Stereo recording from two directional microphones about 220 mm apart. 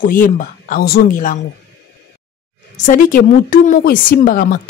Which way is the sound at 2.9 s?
35° left (ahead or behind).